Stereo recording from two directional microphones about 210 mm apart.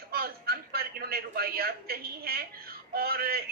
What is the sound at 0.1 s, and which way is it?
A man's voice, 45° right (ahead or behind).